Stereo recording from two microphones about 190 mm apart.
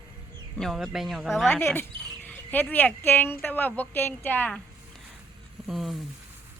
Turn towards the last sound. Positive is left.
turn(degrees=0)  # may be behind; listen again after turning